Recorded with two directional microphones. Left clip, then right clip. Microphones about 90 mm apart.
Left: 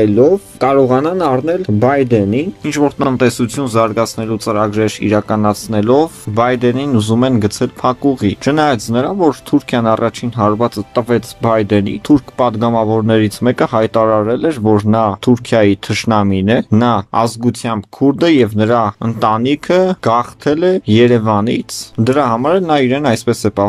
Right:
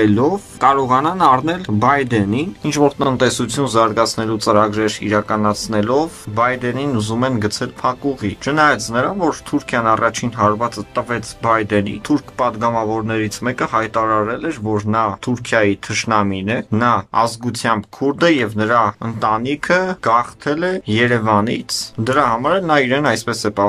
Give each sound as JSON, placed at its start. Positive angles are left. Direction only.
{"t": 0.0, "sound": "speech", "side_deg": 25}
{"t": 2.6, "sound": "speech", "side_deg": 0}
{"t": 3.0, "sound": "speech", "side_deg": 15}
{"t": 3.4, "sound": "speech", "side_deg": 25}
{"t": 17.2, "sound": "speech", "side_deg": 35}